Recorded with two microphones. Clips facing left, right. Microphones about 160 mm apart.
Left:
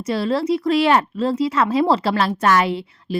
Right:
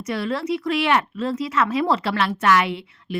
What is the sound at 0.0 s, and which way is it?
Speech, 30° left (ahead or behind).